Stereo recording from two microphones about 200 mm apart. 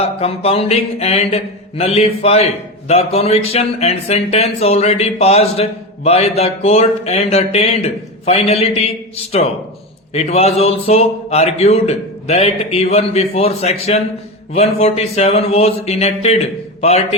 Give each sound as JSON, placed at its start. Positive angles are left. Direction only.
{"t": 0.0, "sound": "a man's voice", "side_deg": 30}